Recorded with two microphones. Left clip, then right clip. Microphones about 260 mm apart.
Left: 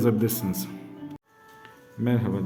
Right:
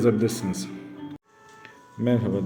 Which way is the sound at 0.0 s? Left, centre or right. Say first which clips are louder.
Right 2 dB; centre.